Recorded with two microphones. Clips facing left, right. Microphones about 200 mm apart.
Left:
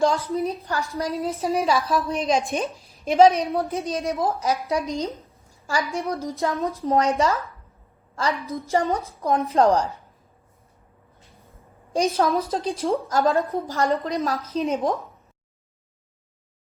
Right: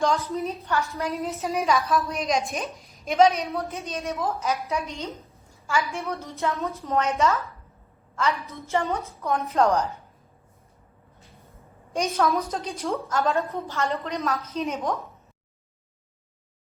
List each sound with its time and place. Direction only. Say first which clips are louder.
0.0 s a woman's voice: left 3 dB; 35° left (ahead or behind)
11.9 s a woman's voice: left 3 dB; 30° left (ahead or behind)